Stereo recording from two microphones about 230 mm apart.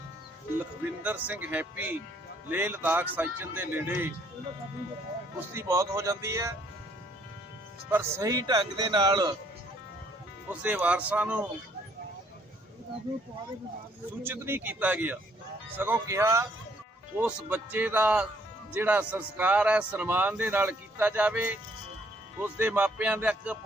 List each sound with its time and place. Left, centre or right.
1.0 s speech: centre
5.5 s speech: centre
7.9 s speech: centre
10.5 s speech: centre
14.3 s speech: centre